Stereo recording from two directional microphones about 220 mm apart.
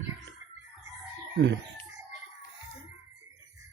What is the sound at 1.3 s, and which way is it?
Speech, 55° right (ahead or behind).